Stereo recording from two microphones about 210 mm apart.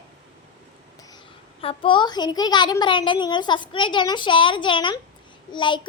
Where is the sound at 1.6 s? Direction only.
25° left (ahead or behind).